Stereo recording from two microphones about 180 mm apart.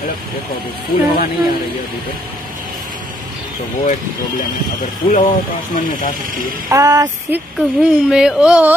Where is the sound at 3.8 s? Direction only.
50° left (ahead or behind).